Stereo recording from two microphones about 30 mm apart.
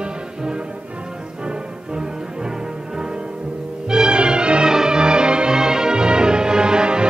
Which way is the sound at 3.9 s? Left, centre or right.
Right.